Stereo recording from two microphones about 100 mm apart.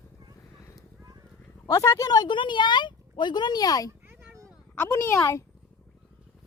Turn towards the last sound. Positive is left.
turn(degrees=25)  # may be behind; listen again after turning